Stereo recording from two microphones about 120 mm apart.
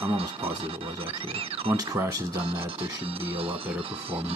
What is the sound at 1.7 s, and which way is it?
Speech, 25° right (ahead or behind).